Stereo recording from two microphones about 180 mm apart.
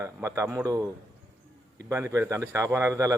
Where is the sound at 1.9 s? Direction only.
15° right (ahead or behind).